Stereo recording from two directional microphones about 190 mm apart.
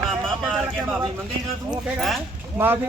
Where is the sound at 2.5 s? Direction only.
10° right (ahead or behind).